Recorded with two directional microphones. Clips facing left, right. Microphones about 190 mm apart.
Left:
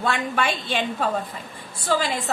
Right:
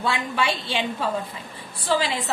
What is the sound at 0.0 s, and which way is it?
A woman's voice, 55° left (ahead or behind).